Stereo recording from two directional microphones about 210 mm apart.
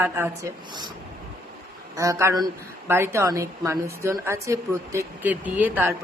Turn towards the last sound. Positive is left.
turn(degrees=-10)  # may be behind; listen again after turning